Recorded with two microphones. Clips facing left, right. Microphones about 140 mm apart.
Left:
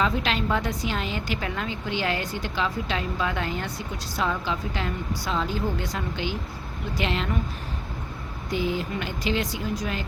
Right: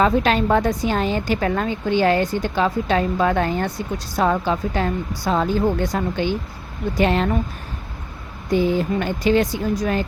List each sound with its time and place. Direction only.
0.0 s a woman's voice: 45° right (ahead or behind)
8.7 s a woman's voice: 40° right (ahead or behind)